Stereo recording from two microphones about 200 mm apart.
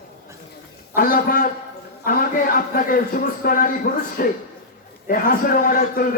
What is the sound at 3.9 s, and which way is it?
Speech, 55° left (ahead or behind).